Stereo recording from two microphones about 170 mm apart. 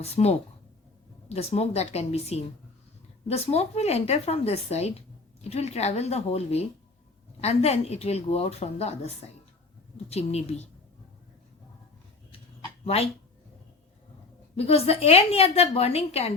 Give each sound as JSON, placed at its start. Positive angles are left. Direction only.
{"t": 0.0, "sound": "a woman's voice", "side_deg": 40}
{"t": 12.8, "sound": "speech", "side_deg": 35}
{"t": 14.5, "sound": "a woman's voice", "side_deg": 35}